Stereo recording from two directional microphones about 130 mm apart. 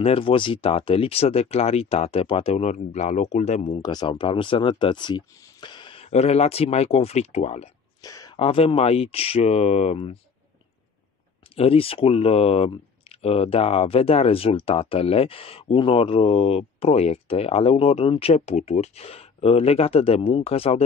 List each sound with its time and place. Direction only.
0.0 s speech: 45° left (ahead or behind); by 3.7 s 60° left (ahead or behind)
3.7 s speech: 35° left (ahead or behind)
6.0 s speech: 55° left (ahead or behind)
8.0 s a sound: 30° left (ahead or behind)
8.4 s speech: 45° left (ahead or behind)
11.5 s speech: 50° left (ahead or behind)